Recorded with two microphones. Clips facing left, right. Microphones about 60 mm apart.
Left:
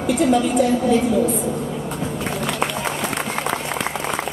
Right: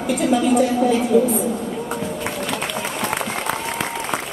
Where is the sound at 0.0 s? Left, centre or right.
Centre.